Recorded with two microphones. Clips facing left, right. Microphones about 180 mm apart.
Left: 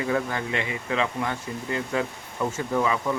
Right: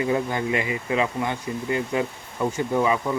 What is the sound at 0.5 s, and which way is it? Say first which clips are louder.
Speech: right 3 dB; 10° right (ahead or behind).